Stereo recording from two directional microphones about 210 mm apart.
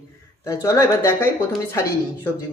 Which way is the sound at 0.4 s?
15° left (ahead or behind).